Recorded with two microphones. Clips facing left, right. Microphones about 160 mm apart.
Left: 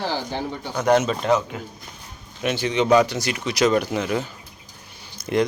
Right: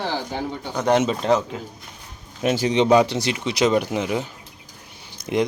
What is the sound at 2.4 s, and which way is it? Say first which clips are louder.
Speech: right 2 dB; 35° right (ahead or behind).